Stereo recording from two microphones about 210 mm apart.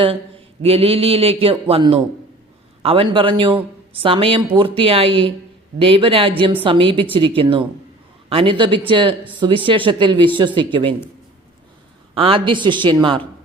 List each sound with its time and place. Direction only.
0.0 s a man's voice: 25° right (ahead or behind)
12.1 s a man's voice: 25° right (ahead or behind)